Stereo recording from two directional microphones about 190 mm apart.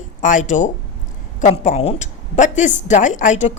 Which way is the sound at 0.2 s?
40° left (ahead or behind).